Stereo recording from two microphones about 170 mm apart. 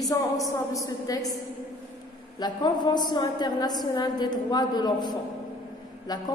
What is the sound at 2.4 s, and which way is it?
A woman's voice, 25° left (ahead or behind).